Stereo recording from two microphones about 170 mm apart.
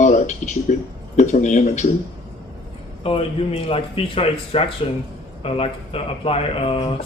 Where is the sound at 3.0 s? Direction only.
35° left (ahead or behind).